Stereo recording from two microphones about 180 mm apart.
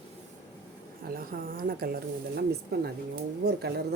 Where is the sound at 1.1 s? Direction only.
55° right (ahead or behind).